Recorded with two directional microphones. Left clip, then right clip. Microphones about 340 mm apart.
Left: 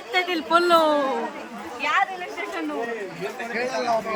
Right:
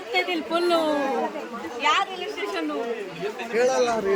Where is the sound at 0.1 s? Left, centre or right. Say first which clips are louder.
Left 4 dB; centre.